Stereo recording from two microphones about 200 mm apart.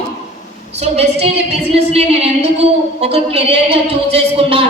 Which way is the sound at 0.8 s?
30° right (ahead or behind).